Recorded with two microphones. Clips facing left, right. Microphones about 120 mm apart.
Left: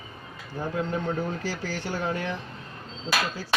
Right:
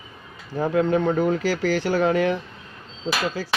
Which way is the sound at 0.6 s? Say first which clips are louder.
Right 9 dB; 90° right.